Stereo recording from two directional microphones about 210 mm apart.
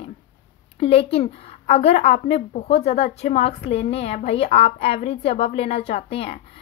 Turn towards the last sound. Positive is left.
turn(degrees=30)  # may be behind; listen again after turning